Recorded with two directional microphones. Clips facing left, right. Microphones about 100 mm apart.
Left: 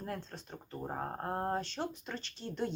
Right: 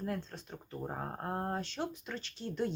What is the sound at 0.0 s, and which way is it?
Speech, centre (ahead or behind).